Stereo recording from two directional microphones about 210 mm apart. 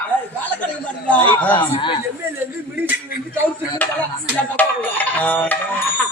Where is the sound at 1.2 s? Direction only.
5° left (ahead or behind).